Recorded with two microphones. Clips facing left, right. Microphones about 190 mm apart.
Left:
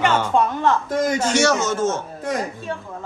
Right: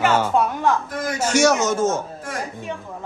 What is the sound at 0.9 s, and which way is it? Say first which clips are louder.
Speech: left 6 dB; 25° left (ahead or behind).